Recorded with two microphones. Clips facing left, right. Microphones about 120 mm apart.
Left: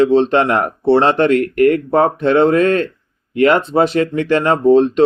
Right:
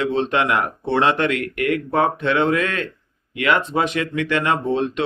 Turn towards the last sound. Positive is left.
turn(degrees=35)  # may be behind; listen again after turning